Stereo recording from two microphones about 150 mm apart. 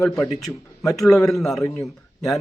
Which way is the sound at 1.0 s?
Centre (ahead or behind).